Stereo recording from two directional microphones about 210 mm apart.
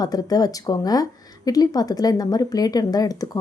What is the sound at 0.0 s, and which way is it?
Speech, 20° left (ahead or behind).